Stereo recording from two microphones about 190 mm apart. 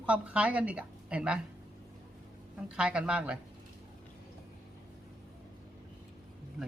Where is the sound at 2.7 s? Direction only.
5° right (ahead or behind).